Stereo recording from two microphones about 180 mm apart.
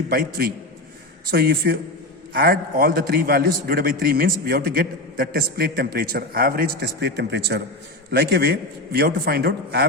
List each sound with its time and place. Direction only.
0.1 s a man's voice: 60° right (ahead or behind)